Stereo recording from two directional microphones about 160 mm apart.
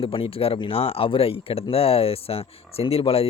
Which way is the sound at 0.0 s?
35° left (ahead or behind).